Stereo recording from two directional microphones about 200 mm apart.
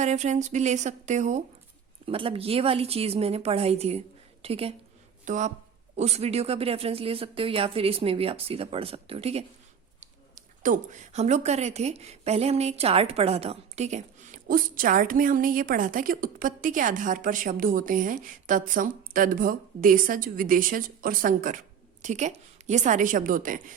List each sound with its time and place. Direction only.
0.0 s speech: 35° right (ahead or behind)